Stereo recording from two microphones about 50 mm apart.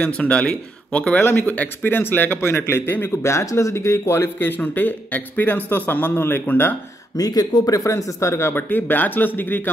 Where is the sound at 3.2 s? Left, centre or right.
Left.